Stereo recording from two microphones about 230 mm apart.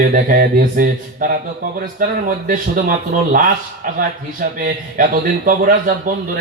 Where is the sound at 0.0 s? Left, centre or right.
Right.